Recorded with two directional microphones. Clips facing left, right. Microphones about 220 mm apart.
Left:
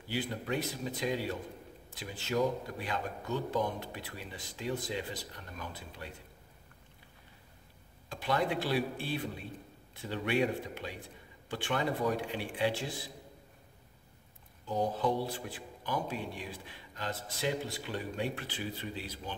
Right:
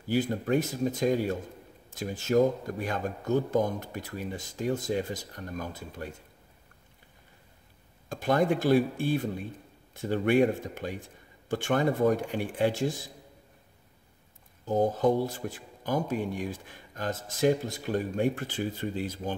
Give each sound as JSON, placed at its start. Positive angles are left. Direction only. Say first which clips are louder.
{"t": 0.0, "sound": "speech", "louder": "right 8 dB", "side_deg": -45}
{"t": 8.1, "sound": "speech", "louder": "right 7 dB", "side_deg": -45}
{"t": 14.7, "sound": "speech", "louder": "right 7 dB", "side_deg": -45}